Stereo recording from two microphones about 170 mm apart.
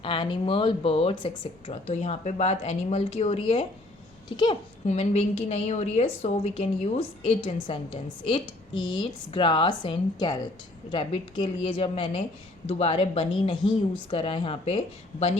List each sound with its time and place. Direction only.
0.0 s a woman's voice: 30° left (ahead or behind)
4.9 s a woman's voice: 35° left (ahead or behind)